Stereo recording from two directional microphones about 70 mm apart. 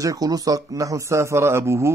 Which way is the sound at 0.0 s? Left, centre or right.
Right.